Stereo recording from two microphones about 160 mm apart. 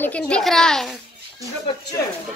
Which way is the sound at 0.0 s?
5° left (ahead or behind).